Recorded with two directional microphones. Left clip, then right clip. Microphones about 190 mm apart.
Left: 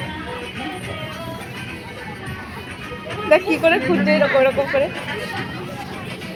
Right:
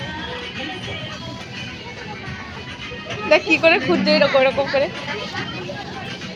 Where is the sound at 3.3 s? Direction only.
5° right (ahead or behind).